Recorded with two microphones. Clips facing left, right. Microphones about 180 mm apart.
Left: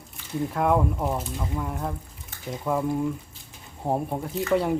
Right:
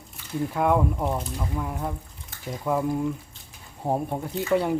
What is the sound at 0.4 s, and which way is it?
Speech, centre (ahead or behind).